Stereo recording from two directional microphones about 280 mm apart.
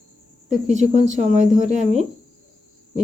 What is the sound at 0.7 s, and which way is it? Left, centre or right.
Speech, right.